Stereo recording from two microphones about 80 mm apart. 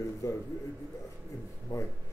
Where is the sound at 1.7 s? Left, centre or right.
Left.